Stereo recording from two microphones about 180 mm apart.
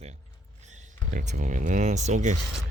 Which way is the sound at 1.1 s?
45° right (ahead or behind).